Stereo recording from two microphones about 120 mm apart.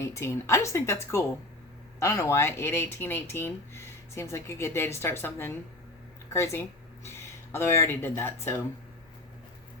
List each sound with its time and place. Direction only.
0.0 s speech: 25° left (ahead or behind)